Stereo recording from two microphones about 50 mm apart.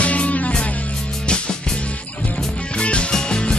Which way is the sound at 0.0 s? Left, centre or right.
Left.